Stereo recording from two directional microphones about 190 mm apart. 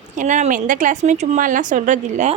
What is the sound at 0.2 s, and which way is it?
A woman's voice, 40° right (ahead or behind).